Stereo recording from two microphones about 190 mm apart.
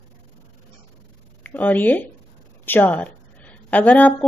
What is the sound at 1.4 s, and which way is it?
A woman's voice, 10° left (ahead or behind).